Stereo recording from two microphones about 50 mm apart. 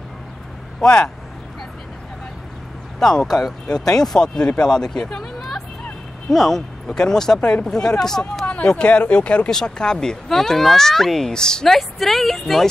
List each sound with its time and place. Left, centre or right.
0.7 s speech: left
3.0 s speech: centre
7.3 s speech: left
8.5 s speech: left
9.5 s speech: centre